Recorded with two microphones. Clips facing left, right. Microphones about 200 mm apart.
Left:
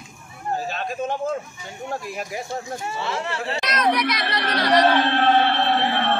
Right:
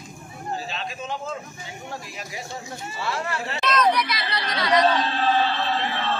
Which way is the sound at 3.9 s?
55° left (ahead or behind).